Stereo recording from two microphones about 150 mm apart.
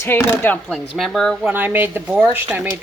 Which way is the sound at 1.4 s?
10° right (ahead or behind).